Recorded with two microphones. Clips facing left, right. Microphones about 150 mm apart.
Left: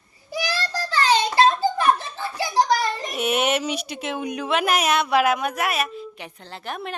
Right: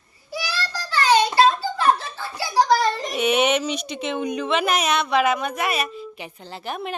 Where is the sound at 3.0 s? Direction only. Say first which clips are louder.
Right 3 dB; 5° left (ahead or behind).